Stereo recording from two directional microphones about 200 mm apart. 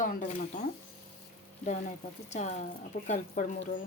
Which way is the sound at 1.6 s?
35° left (ahead or behind).